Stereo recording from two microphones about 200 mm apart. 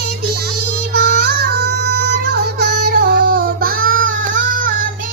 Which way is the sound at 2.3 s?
55° right (ahead or behind).